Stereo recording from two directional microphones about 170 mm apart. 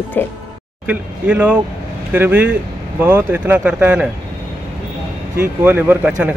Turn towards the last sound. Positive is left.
turn(degrees=-10)  # may be behind; listen again after turning